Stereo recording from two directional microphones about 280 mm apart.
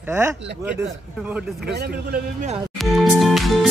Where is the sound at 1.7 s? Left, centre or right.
Right.